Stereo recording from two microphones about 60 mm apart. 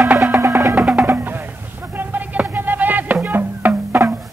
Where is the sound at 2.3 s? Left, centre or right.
Right.